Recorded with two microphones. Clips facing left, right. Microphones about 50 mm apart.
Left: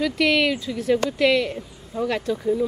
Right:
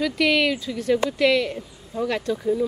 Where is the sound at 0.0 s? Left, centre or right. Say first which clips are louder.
Even; centre.